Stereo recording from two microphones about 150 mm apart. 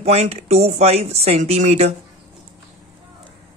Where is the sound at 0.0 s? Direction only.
45° right (ahead or behind).